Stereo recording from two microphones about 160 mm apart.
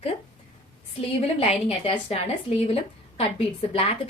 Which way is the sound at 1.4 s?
35° left (ahead or behind).